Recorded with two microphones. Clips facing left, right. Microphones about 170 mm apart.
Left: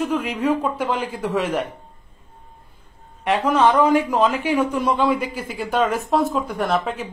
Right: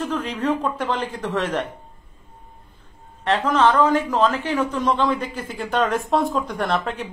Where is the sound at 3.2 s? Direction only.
10° left (ahead or behind).